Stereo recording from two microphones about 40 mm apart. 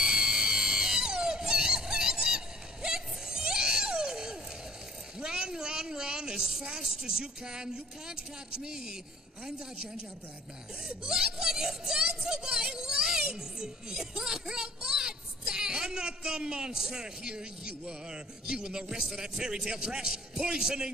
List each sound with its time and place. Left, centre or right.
0.0 s screaming: centre
5.2 s a sound: centre
6.8 s a man's voice: centre
10.8 s a man's voice: centre
12.3 s music: centre
16.3 s a man's voice: centre